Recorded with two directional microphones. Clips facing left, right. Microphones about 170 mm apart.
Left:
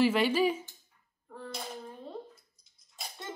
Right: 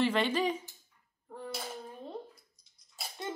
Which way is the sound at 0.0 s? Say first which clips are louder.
Left 3 dB; 5° left (ahead or behind).